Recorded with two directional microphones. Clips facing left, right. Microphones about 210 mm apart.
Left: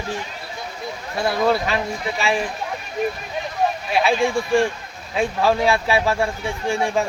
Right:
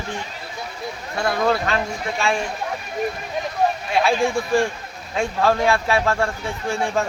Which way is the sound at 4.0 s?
Centre (ahead or behind).